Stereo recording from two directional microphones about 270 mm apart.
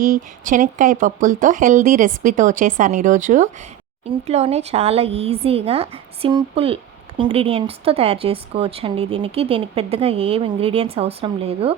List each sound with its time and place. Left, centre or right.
0.0 s speech: right